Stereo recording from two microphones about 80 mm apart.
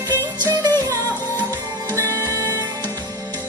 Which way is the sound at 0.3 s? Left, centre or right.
Right.